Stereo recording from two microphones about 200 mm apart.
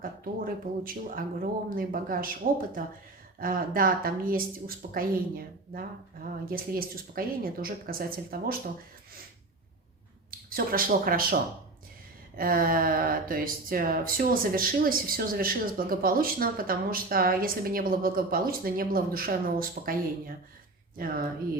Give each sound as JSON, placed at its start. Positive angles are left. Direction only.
{"t": 0.0, "sound": "speech", "side_deg": -45}
{"t": 10.5, "sound": "speech", "side_deg": -45}
{"t": 12.4, "sound": "speech", "side_deg": -45}